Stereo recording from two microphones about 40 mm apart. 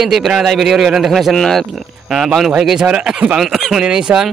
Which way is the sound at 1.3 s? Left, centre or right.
Centre.